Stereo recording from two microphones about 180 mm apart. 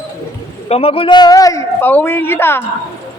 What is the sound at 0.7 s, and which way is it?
A woman's voice, 30° left (ahead or behind).